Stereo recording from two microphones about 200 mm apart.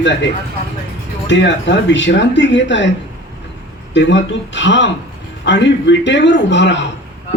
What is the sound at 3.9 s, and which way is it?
A man's voice, 65° left (ahead or behind).